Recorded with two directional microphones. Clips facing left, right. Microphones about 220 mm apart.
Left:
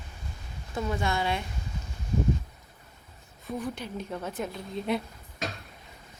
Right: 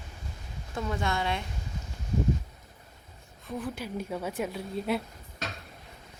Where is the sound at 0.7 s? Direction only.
5° left (ahead or behind).